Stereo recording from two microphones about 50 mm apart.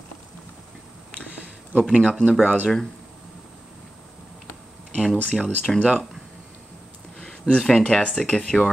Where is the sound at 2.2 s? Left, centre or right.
Right.